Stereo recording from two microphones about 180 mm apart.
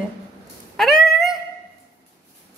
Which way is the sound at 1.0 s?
Centre (ahead or behind).